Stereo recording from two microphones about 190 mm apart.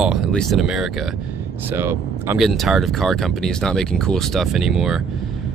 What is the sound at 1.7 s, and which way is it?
Speech, 10° right (ahead or behind).